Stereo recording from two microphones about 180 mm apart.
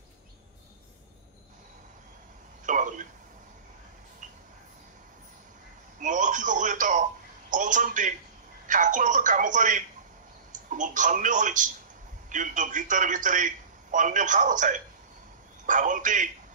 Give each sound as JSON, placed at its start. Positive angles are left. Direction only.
{"t": 2.6, "sound": "a sound", "side_deg": -45}
{"t": 5.9, "sound": "telephone", "side_deg": -45}
{"t": 7.5, "sound": "a man's voice", "side_deg": -45}